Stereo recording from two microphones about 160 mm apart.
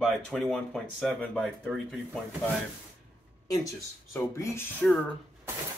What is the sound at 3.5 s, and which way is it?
Speech, 20° left (ahead or behind).